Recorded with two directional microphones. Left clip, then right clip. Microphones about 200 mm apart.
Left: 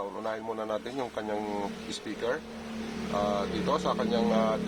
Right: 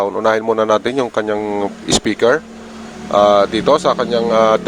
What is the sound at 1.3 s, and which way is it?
Speech, 25° right (ahead or behind).